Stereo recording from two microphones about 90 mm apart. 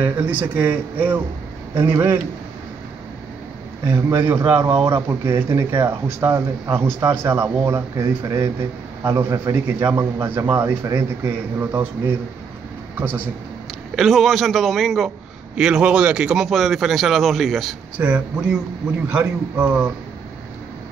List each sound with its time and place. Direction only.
0.0 s speech: 15° right (ahead or behind)
3.8 s a man's voice: 30° right (ahead or behind)
4.6 s speech: 90° right
4.8 s speech: 30° right (ahead or behind)
12.9 s a man's voice: 20° right (ahead or behind)
13.9 s a man's voice: centre (ahead or behind)
17.9 s a man's voice: 15° right (ahead or behind)